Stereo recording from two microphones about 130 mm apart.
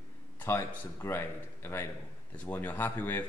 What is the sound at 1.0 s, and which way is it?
Speech, 20° left (ahead or behind).